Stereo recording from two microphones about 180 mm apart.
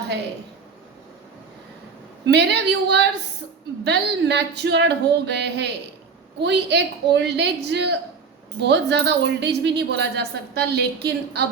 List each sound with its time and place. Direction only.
2.2 s speech: 70° right (ahead or behind)